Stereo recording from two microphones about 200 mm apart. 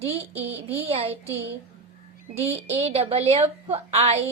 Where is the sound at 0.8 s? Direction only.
30° right (ahead or behind).